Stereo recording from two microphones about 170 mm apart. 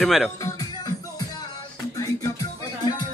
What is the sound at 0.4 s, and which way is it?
Music, 20° left (ahead or behind).